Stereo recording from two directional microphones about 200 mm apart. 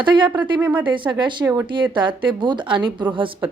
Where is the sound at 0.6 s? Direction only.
5° right (ahead or behind).